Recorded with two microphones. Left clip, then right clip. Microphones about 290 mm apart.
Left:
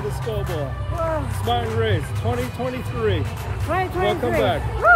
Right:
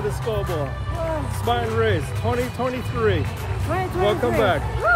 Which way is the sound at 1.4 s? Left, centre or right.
Centre.